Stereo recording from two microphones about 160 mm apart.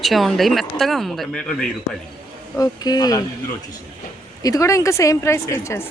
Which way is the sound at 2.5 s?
25° left (ahead or behind).